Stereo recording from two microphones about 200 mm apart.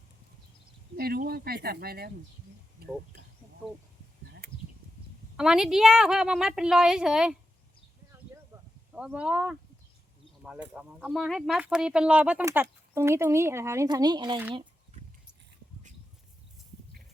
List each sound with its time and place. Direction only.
0.9 s speech: 50° right (ahead or behind)
2.8 s a sound: 50° right (ahead or behind)
5.4 s a woman's voice: 5° right (ahead or behind)
8.9 s a woman's voice: 5° right (ahead or behind); by 14.4 s 20° right (ahead or behind)